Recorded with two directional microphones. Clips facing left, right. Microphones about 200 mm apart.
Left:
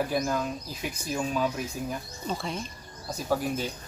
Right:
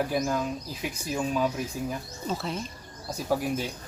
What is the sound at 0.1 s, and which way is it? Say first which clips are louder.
Speech: right 1 dB; centre (ahead or behind).